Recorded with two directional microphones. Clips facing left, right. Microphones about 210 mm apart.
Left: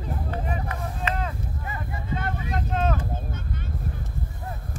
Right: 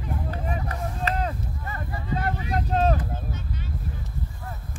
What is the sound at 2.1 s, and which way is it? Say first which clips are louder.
Vehicle: right 2 dB; 35° right (ahead or behind).